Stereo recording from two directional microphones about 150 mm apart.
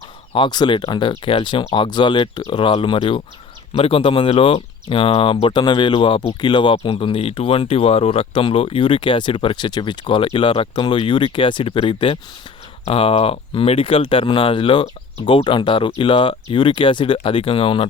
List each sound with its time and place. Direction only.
0.3 s speech: 30° left (ahead or behind)